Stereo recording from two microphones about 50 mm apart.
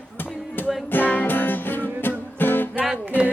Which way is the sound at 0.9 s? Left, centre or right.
Left.